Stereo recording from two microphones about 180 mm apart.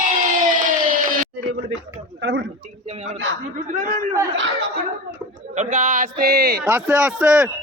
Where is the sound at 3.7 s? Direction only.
45° right (ahead or behind).